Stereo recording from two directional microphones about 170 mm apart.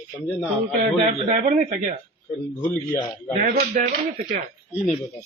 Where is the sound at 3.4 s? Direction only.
55° right (ahead or behind).